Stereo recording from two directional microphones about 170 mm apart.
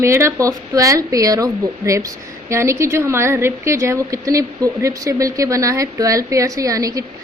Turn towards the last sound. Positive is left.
turn(degrees=-20)  # may be behind; listen again after turning